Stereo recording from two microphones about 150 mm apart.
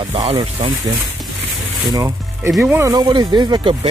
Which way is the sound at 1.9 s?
20° right (ahead or behind).